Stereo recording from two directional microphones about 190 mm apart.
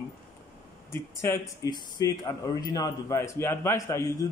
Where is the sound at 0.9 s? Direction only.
15° left (ahead or behind).